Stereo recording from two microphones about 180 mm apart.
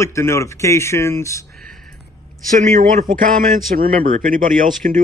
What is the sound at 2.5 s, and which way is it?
Speech, 45° right (ahead or behind).